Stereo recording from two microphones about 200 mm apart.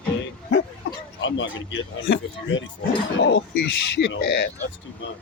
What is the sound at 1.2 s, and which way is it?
Speech, 70° left (ahead or behind).